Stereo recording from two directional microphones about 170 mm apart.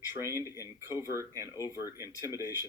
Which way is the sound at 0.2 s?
15° right (ahead or behind).